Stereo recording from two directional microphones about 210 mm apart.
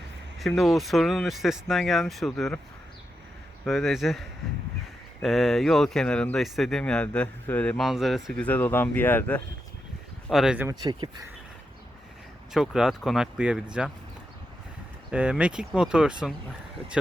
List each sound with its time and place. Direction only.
0.3 s speech: centre (ahead or behind)
3.7 s speech: centre (ahead or behind)
10.2 s speech: centre (ahead or behind)
10.7 s speech: 20° right (ahead or behind)
12.5 s speech: centre (ahead or behind)
15.1 s speech: 5° right (ahead or behind)